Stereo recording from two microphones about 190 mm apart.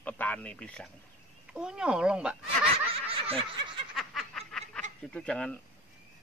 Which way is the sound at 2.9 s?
30° right (ahead or behind).